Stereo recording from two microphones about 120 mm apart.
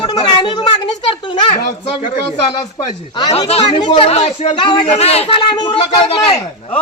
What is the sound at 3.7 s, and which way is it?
Speech, 40° left (ahead or behind).